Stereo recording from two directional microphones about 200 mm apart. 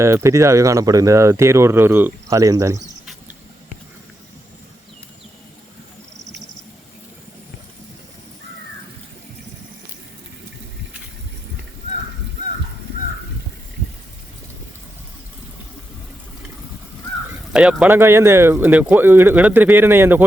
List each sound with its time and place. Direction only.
0.0 s speech: 15° right (ahead or behind)
6.1 s cricket: 60° right (ahead or behind)
17.3 s speech: 5° right (ahead or behind)